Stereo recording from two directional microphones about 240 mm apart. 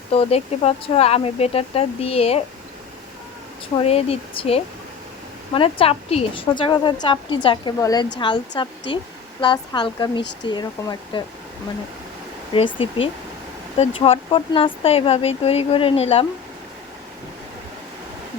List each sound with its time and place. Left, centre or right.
0.1 s a woman's voice: left
3.8 s a woman's voice: left
12.5 s a woman's voice: left